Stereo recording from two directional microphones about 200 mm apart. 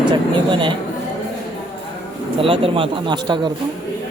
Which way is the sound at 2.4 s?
25° right (ahead or behind).